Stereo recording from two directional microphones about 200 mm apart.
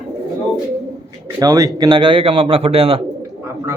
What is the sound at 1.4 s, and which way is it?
A man's voice, 15° right (ahead or behind).